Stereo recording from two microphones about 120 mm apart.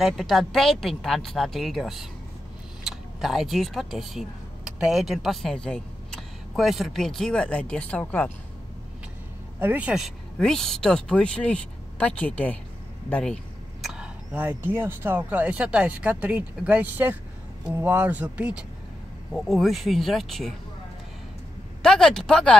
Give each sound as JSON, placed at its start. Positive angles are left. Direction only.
{"t": 0.0, "sound": "speech", "side_deg": 0}
{"t": 9.6, "sound": "speech", "side_deg": -15}
{"t": 17.9, "sound": "speech", "side_deg": -10}
{"t": 19.3, "sound": "speech", "side_deg": 0}
{"t": 21.8, "sound": "speech", "side_deg": 5}